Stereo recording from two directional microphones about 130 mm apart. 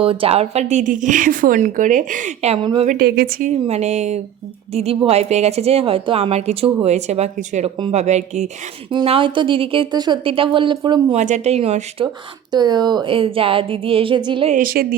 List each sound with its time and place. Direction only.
0.0 s speech: 45° right (ahead or behind); by 2.6 s 60° right (ahead or behind)
2.8 s speech: 90° right
3.7 s a woman's voice: 60° right (ahead or behind)
8.9 s speech: 40° right (ahead or behind)
11.1 s speech: 65° right (ahead or behind)
12.5 s speech: 30° right (ahead or behind)
14.5 s speech: 90° right